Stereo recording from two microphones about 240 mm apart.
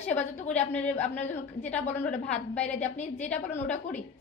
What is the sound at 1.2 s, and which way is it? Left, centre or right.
Speech, left.